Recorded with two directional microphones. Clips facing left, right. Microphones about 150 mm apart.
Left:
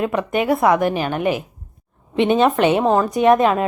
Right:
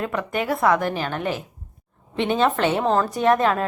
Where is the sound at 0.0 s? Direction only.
20° left (ahead or behind).